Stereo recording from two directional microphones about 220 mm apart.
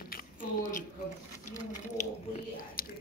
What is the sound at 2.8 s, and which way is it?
Whispering, 40° left (ahead or behind).